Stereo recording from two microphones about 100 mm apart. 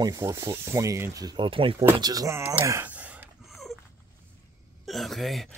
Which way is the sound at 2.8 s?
15° right (ahead or behind).